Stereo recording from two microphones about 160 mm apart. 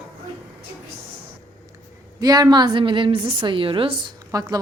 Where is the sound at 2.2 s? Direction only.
25° right (ahead or behind).